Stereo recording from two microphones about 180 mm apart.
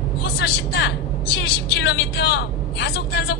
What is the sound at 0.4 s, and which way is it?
A woman's voice, 70° left (ahead or behind).